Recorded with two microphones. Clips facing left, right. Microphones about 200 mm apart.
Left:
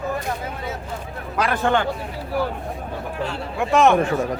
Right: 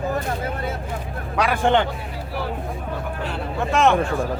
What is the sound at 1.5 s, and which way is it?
Speech, 20° right (ahead or behind).